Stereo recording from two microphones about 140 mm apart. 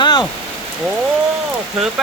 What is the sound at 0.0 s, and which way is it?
Rain on surface, 30° left (ahead or behind).